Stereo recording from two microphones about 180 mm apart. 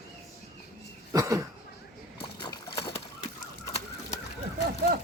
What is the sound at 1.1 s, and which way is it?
Cough, 20° right (ahead or behind).